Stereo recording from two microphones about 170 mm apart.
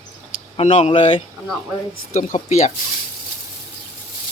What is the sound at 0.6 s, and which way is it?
Speech, 40° left (ahead or behind).